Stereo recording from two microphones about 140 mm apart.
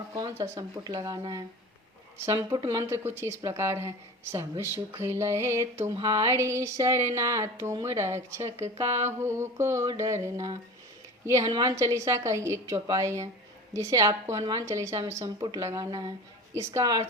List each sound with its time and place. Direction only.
0.5 s a woman's voice: 25° right (ahead or behind)